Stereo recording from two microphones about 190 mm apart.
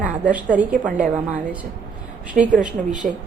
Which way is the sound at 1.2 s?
5° right (ahead or behind).